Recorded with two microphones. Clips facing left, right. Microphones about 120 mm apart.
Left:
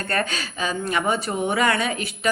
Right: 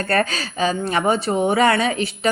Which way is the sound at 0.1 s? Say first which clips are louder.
Right 5 dB; 35° right (ahead or behind).